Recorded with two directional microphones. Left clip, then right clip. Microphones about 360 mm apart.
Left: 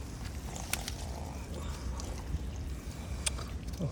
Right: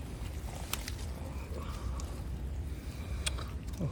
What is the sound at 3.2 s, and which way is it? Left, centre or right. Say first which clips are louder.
Vehicle: even; centre.